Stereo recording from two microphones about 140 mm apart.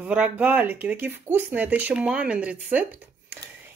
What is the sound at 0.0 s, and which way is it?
Speech, 10° right (ahead or behind).